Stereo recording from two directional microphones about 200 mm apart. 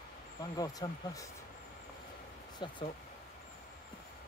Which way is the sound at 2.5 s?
25° left (ahead or behind).